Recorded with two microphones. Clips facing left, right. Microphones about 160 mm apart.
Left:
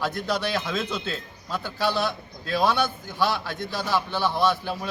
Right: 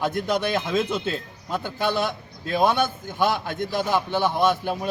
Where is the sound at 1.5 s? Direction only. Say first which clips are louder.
Right 1 dB; 20° right (ahead or behind).